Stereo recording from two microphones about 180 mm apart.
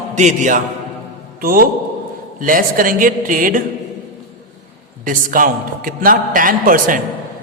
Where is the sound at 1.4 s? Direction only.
55° right (ahead or behind).